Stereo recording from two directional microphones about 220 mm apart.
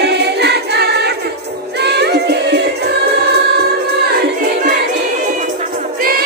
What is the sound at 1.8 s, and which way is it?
Music, 50° right (ahead or behind).